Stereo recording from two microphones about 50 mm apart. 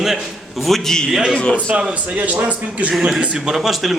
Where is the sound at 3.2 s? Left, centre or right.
Centre.